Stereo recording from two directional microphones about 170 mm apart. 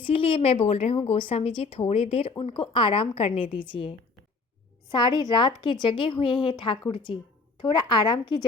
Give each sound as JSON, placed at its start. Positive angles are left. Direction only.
{"t": 0.0, "sound": "a woman's voice", "side_deg": 30}